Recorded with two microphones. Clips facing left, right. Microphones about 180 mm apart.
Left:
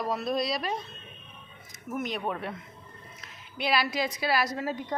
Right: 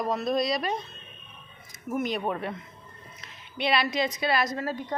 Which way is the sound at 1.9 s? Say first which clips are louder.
Right 3 dB; centre (ahead or behind).